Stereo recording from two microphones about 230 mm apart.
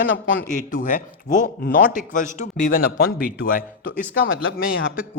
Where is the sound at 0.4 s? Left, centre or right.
Left.